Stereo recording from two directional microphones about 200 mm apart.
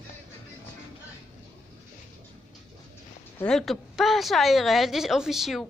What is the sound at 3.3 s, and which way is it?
A woman's voice, centre (ahead or behind).